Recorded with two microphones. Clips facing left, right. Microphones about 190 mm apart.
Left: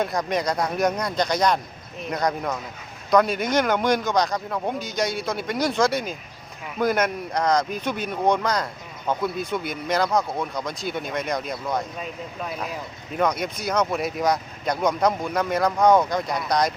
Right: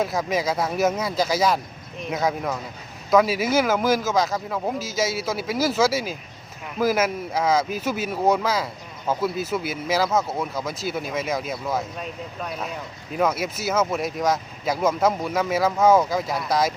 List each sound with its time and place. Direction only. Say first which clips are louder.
0.0 s speech: right 1 dB; 5° right (ahead or behind)